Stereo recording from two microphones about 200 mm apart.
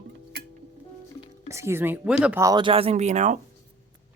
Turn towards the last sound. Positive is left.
turn(degrees=-35)  # may be behind; listen again after turning